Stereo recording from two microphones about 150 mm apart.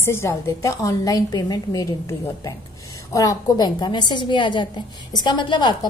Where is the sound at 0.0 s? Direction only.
15° left (ahead or behind).